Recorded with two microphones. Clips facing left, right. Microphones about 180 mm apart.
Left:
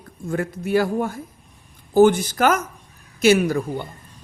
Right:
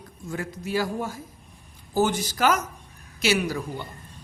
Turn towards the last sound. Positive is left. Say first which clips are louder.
# left 7 dB
turn(degrees=50)  # may be behind; listen again after turning